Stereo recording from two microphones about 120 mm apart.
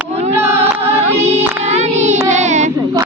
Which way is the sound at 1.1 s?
65° right (ahead or behind).